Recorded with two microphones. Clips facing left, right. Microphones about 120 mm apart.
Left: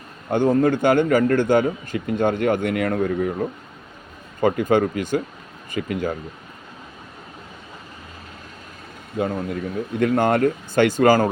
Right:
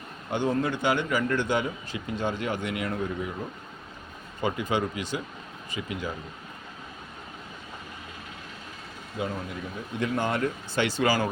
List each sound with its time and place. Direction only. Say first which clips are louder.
0.3 s a man's voice: left 9 dB; 45° left (ahead or behind)
4.4 s a man's voice: left 9 dB; 50° left (ahead or behind)
9.1 s a man's voice: left 8 dB; 55° left (ahead or behind)